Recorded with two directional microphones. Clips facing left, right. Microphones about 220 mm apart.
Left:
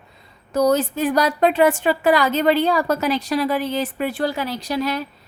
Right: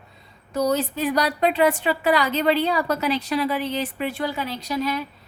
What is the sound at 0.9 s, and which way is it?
A woman's voice, 45° left (ahead or behind).